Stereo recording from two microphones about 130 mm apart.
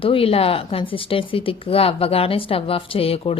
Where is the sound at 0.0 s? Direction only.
45° left (ahead or behind).